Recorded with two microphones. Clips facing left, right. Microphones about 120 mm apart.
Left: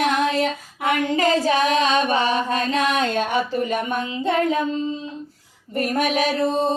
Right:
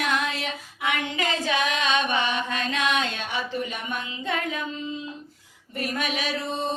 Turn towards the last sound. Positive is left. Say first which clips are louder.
# left 9 dB
turn(degrees=40)  # may be behind; listen again after turning